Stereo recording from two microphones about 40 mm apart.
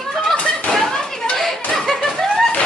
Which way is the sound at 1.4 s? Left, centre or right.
Centre.